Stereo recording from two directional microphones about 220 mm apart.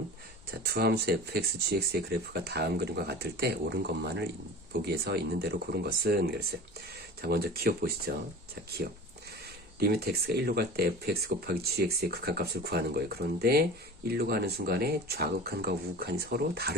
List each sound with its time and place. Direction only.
0.6 s speech: 45° right (ahead or behind)
9.8 s speech: 45° right (ahead or behind)